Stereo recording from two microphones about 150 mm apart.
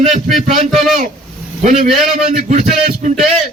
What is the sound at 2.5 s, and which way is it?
Speech, 50° right (ahead or behind).